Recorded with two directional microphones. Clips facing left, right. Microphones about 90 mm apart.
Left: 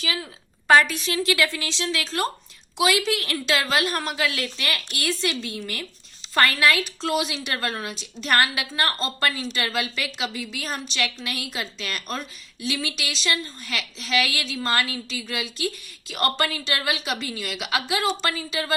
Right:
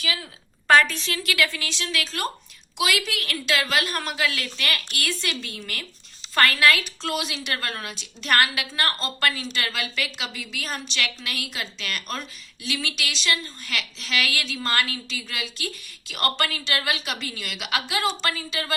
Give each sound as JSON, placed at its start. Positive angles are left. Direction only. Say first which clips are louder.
{"t": 0.7, "sound": "a woman's voice", "louder": "left 1 dB", "side_deg": 15}